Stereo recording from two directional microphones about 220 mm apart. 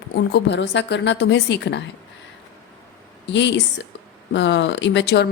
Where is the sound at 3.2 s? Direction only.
55° left (ahead or behind).